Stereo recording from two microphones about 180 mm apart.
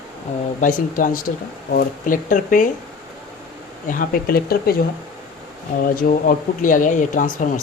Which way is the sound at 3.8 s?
50° left (ahead or behind).